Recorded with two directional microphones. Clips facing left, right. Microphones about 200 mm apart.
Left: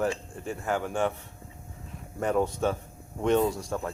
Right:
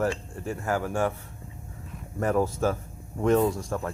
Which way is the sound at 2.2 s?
Centre (ahead or behind).